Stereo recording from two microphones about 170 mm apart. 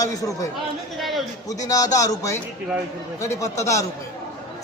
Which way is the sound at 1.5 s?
20° left (ahead or behind).